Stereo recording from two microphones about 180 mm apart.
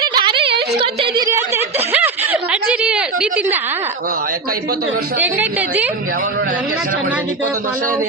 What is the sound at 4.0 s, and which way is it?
Speech, 50° right (ahead or behind).